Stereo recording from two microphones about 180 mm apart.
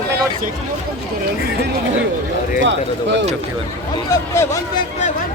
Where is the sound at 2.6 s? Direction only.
85° right.